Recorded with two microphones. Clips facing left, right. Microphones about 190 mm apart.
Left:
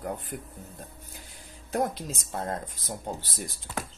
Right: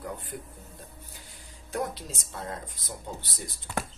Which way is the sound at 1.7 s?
50° left (ahead or behind).